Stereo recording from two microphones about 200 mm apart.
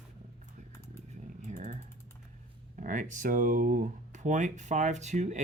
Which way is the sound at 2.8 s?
40° right (ahead or behind).